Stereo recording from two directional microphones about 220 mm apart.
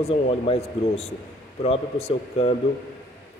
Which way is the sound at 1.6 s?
30° left (ahead or behind).